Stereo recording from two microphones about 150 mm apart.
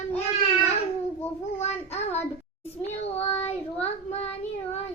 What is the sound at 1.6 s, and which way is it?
Child singing, 45° left (ahead or behind).